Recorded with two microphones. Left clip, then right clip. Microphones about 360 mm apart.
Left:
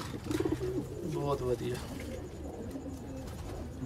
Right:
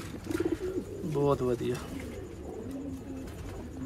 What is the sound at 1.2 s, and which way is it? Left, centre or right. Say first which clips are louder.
Speech: right 5 dB; centre.